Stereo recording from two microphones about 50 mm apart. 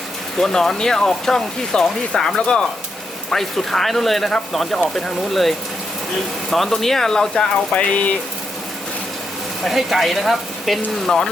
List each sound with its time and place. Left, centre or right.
0.3 s speech: centre
7.7 s speech: left
9.6 s speech: centre